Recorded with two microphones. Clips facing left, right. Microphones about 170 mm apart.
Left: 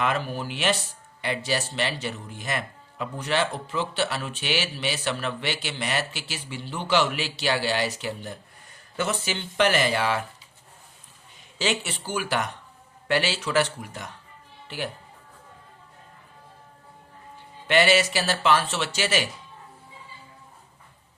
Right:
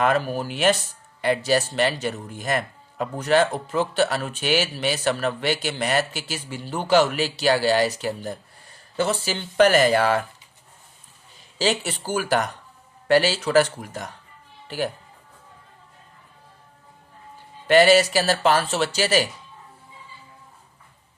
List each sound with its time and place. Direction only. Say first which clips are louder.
0.0 s speech: right 5 dB; 45° right (ahead or behind)
11.5 s speech: right 4 dB; 35° right (ahead or behind)
17.7 s speech: right 6 dB; 40° right (ahead or behind)